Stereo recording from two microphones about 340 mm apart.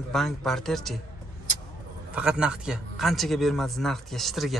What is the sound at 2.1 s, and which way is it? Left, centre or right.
A man's voice, centre.